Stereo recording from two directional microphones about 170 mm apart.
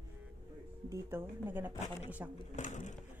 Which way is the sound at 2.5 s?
45° left (ahead or behind).